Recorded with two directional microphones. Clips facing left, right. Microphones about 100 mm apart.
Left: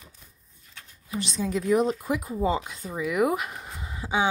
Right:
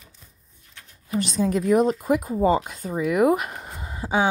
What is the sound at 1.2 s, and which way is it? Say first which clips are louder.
A woman's voice: right 5 dB; 50° right (ahead or behind).